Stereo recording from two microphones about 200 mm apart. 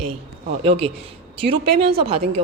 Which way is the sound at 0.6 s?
30° right (ahead or behind).